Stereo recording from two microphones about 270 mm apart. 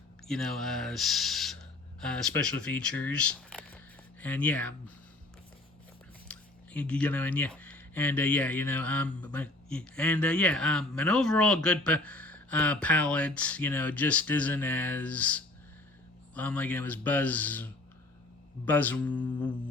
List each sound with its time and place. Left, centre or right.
0.3 s speech: centre
6.2 s speech: centre
18.6 s mantra: centre